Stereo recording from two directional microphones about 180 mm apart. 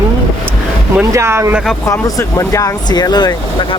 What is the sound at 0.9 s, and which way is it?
Speech, 15° right (ahead or behind).